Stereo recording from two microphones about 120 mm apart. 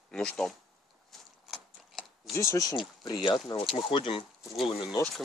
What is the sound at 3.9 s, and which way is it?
Speech, 50° left (ahead or behind).